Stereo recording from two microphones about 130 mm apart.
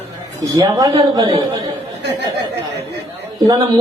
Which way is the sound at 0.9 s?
40° right (ahead or behind).